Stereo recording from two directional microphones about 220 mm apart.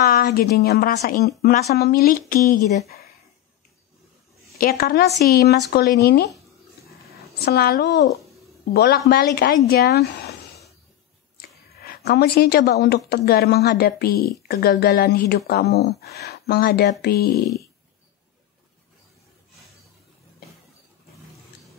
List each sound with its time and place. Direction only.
0.0 s a woman's voice: 45° left (ahead or behind)
4.6 s a woman's voice: 45° left (ahead or behind)
7.3 s a woman's voice: 45° left (ahead or behind)
11.3 s a woman's voice: 45° left (ahead or behind)
17.3 s speech: 15° left (ahead or behind)